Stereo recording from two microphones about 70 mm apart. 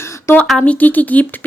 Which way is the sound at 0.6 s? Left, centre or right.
Left.